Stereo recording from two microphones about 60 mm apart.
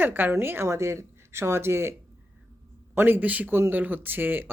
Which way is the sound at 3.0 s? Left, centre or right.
Right.